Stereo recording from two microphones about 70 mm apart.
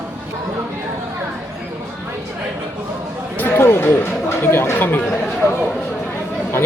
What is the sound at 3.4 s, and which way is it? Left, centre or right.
Speech, left.